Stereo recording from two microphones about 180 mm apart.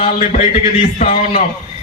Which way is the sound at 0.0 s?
35° left (ahead or behind).